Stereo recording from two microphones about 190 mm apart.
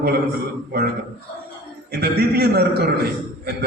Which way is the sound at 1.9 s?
55° right (ahead or behind).